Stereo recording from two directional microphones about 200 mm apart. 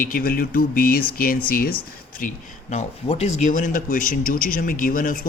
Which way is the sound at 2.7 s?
35° left (ahead or behind).